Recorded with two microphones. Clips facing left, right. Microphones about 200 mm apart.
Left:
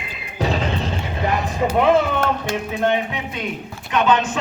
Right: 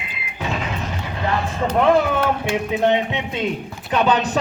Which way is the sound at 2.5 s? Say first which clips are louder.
Right 4 dB; 20° right (ahead or behind).